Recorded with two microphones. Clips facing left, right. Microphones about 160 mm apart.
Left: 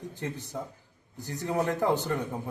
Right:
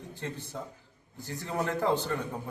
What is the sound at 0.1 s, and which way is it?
A man's voice, 15° left (ahead or behind).